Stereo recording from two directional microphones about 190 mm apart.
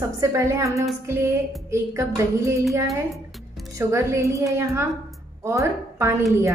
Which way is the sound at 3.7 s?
15° right (ahead or behind).